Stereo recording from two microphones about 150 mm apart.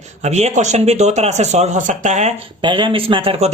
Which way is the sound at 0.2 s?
50° right (ahead or behind).